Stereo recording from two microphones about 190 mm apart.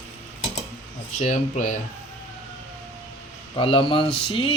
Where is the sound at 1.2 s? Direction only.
40° left (ahead or behind).